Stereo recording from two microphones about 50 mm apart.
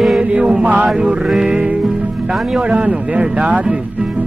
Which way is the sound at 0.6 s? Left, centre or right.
Right.